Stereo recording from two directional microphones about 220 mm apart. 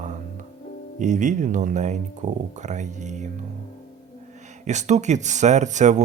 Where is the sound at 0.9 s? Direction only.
35° right (ahead or behind).